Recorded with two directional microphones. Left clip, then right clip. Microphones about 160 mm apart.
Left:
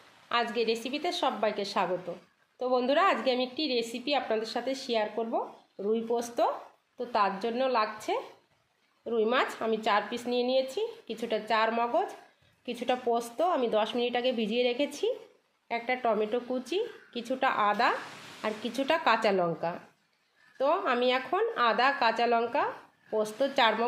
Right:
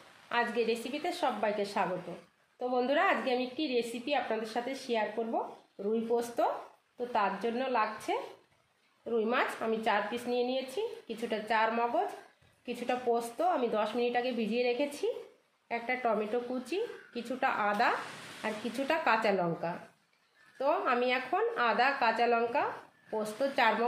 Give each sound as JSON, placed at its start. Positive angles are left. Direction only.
{"t": 0.3, "sound": "a woman's voice", "side_deg": 60}